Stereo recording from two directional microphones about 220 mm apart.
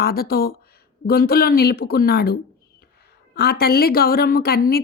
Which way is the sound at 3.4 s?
45° left (ahead or behind).